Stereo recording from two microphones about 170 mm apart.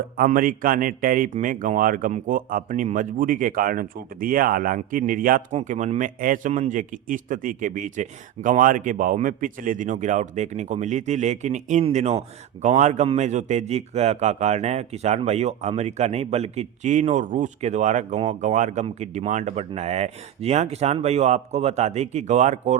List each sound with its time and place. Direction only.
0.2 s a man's voice: 55° right (ahead or behind)